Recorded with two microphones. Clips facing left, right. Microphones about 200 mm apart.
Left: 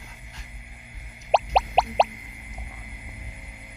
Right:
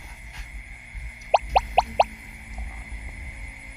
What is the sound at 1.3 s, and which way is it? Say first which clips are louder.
Music: even; centre (ahead or behind).